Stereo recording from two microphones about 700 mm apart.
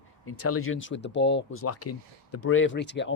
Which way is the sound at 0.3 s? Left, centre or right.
Centre.